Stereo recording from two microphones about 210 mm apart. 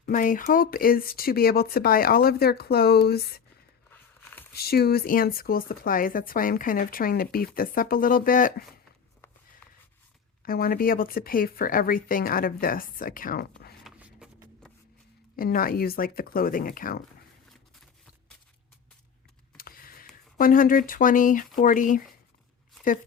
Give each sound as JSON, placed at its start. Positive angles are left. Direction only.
{"t": 0.0, "sound": "speech", "side_deg": 40}
{"t": 4.5, "sound": "speech", "side_deg": 45}
{"t": 10.4, "sound": "speech", "side_deg": 45}
{"t": 13.8, "sound": "a sound", "side_deg": -5}
{"t": 15.4, "sound": "speech", "side_deg": 45}
{"t": 19.5, "sound": "speech", "side_deg": 45}